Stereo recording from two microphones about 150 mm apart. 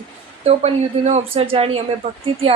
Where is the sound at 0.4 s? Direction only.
45° right (ahead or behind).